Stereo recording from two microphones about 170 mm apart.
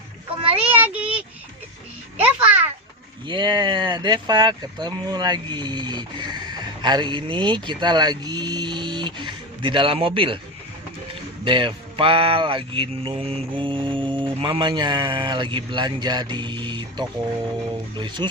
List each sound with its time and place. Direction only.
0.5 s child singing: 10° right (ahead or behind)
2.2 s a child's voice: 10° right (ahead or behind)
3.2 s speech: 25° right (ahead or behind)